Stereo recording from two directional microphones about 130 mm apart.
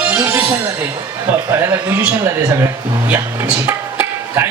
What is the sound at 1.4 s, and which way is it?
Speech, 20° right (ahead or behind).